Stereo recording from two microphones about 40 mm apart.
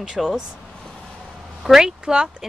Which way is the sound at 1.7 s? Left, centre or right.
Centre.